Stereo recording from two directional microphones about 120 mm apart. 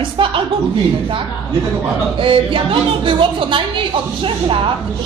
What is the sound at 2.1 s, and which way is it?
A woman's voice, 45° right (ahead or behind).